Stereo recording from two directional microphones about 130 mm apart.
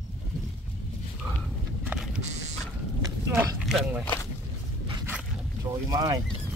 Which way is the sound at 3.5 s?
5° right (ahead or behind).